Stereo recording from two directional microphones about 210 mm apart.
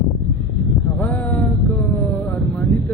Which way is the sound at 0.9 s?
10° left (ahead or behind).